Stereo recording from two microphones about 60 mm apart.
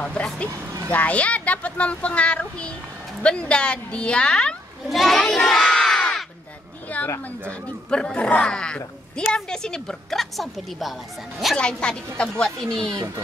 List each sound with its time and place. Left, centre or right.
0.0 s speech: centre
4.8 s crowd: centre
6.9 s a sound: left
7.9 s speech: centre
11.5 s speech: centre